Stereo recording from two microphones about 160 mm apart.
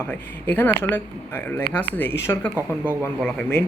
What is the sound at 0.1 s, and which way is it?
Speech, 10° left (ahead or behind).